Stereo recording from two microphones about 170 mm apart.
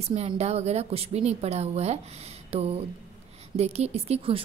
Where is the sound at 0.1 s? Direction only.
40° right (ahead or behind).